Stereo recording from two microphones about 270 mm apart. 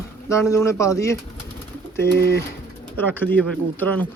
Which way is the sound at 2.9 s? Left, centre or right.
Centre.